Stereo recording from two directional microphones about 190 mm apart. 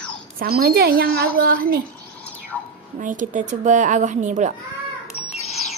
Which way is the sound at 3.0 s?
45° right (ahead or behind).